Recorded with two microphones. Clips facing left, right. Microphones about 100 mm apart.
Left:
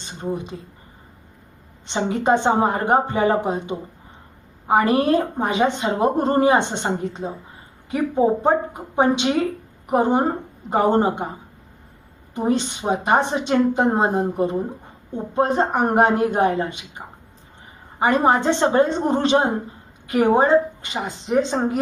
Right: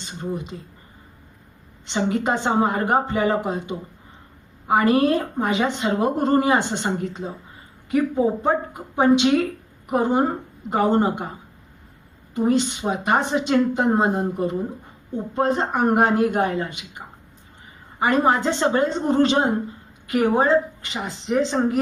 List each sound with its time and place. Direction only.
0.0 s a sound: 25° left (ahead or behind)
1.9 s a woman's voice: 25° left (ahead or behind)
12.3 s a woman's voice: 25° left (ahead or behind)
18.0 s a woman's voice: 25° left (ahead or behind)